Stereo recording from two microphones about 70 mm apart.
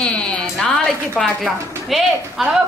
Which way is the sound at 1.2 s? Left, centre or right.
Centre.